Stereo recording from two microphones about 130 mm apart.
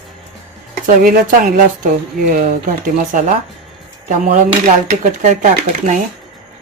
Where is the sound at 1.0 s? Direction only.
90° right.